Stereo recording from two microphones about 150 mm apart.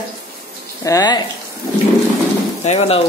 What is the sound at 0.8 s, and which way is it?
Speech, 25° left (ahead or behind).